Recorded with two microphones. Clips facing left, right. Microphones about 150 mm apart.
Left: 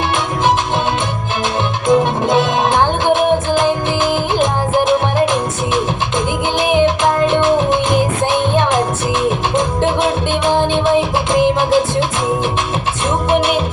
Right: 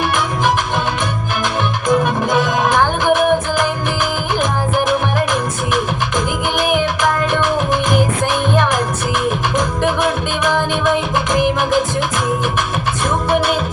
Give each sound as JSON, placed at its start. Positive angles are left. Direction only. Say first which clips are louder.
{"t": 1.9, "sound": "music", "louder": "left 3 dB", "side_deg": 20}